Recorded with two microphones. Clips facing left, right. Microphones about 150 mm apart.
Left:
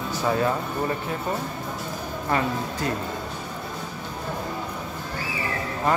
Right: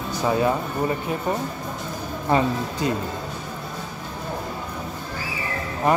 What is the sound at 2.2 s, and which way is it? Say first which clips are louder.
Speech: right 4 dB; 20° right (ahead or behind).